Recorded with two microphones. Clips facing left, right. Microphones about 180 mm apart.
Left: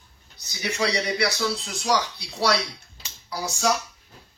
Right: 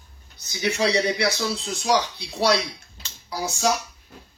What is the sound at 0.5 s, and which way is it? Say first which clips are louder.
Speech: right 4 dB; 20° right (ahead or behind).